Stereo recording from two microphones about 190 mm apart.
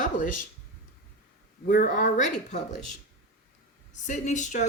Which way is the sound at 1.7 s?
45° left (ahead or behind).